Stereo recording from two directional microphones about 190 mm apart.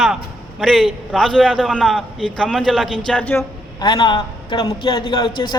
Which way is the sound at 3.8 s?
25° left (ahead or behind).